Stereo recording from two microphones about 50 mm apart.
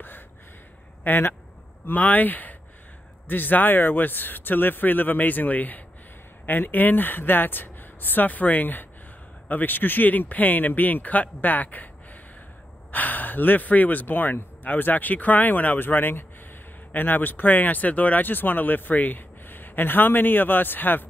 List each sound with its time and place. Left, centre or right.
1.0 s speech: left
12.9 s speech: left